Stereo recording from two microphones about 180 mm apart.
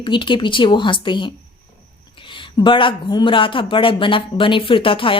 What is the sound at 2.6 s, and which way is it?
Speech, 25° left (ahead or behind).